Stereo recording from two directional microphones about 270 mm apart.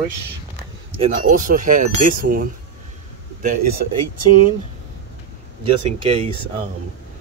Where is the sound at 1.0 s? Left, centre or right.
Right.